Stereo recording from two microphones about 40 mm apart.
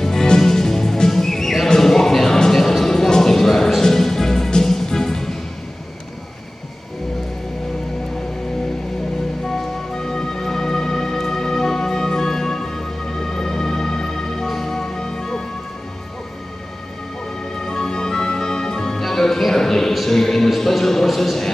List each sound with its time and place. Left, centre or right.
0.0 s music: centre
1.7 s a sound: centre
3.8 s music: centre
9.5 s music: centre
17.6 s music: centre